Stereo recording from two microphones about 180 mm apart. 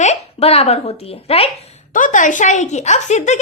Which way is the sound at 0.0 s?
35° left (ahead or behind).